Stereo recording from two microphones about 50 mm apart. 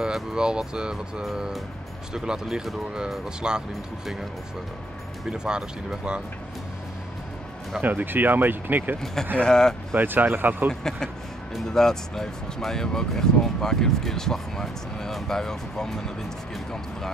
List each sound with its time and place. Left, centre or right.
0.0 s speech: centre
5.3 s speech: centre
7.8 s speech: right
9.0 s speech: centre
9.9 s speech: right
10.7 s speech: centre